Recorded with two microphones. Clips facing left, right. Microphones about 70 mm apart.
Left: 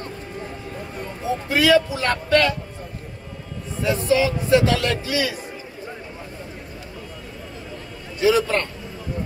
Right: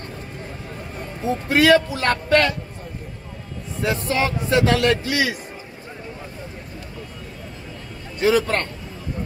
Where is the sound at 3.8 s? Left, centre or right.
Right.